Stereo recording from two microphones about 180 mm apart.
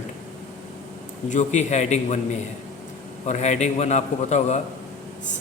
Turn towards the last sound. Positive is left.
turn(degrees=40)  # may be behind; listen again after turning